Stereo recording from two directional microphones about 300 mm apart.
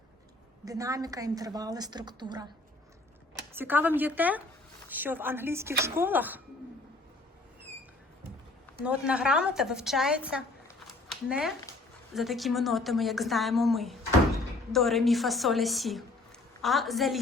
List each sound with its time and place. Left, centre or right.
0.6 s a woman's voice: centre
3.5 s a woman's voice: centre
8.8 s a woman's voice: centre